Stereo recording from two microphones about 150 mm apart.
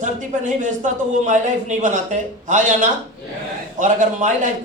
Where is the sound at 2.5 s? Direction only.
55° right (ahead or behind).